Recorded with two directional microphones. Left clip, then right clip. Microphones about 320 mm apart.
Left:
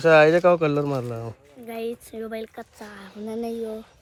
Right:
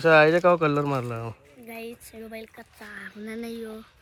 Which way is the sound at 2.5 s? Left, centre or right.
Centre.